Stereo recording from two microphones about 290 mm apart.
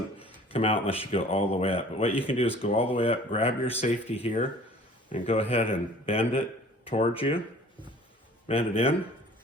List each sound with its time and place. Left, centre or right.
0.5 s speech: centre
8.4 s speech: centre